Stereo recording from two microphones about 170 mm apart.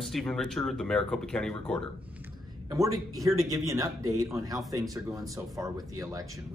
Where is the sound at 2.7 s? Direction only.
20° right (ahead or behind).